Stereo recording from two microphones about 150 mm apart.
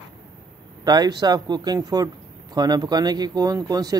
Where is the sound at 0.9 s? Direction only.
30° right (ahead or behind).